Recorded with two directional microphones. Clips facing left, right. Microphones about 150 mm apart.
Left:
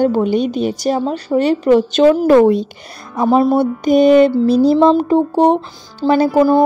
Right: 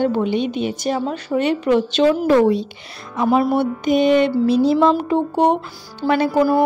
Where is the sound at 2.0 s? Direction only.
50° left (ahead or behind).